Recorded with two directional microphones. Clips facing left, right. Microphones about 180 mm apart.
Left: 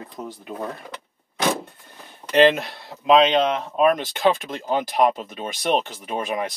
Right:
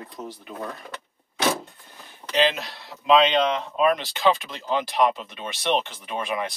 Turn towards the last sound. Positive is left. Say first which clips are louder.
# left 2 dB
turn(degrees=40)  # may be behind; listen again after turning